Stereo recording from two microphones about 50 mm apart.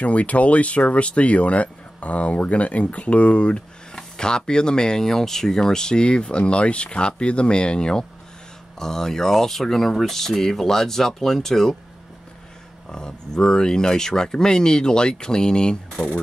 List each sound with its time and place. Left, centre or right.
0.0 s speech: left; by 11.7 s centre
12.9 s speech: centre